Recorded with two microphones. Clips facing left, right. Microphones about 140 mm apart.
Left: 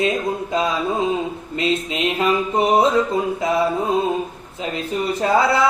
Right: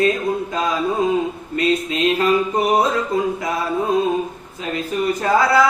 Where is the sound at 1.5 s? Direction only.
20° left (ahead or behind).